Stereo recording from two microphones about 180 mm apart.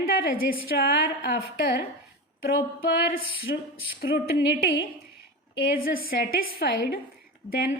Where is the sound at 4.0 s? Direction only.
55° left (ahead or behind).